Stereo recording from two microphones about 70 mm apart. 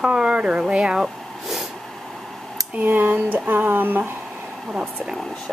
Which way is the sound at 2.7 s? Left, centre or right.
Right.